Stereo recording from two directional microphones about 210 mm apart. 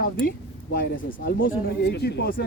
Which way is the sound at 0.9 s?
60° left (ahead or behind).